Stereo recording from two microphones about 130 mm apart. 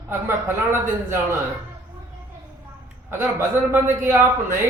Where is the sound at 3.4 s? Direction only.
20° right (ahead or behind).